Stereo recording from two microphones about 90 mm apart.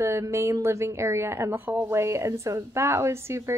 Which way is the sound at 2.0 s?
30° right (ahead or behind).